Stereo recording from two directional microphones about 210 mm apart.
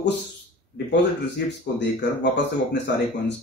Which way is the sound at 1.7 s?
55° left (ahead or behind).